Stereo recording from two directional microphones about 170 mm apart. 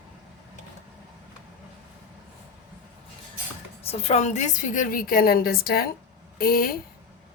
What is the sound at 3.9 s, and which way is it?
A woman's voice, 40° left (ahead or behind).